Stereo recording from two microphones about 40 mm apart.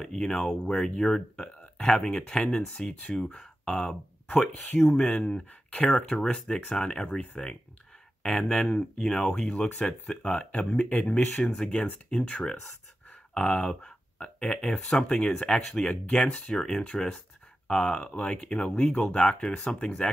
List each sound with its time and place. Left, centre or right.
0.0 s speech: centre
4.6 s speech: left
13.3 s speech: centre
16.5 s speech: centre